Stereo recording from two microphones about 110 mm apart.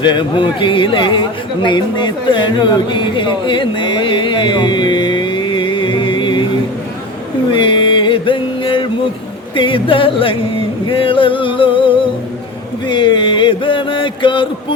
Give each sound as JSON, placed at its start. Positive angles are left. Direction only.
{"t": 0.0, "sound": "a man's voice", "side_deg": 45}
{"t": 7.5, "sound": "a sound", "side_deg": 50}
{"t": 9.6, "sound": "music", "side_deg": 50}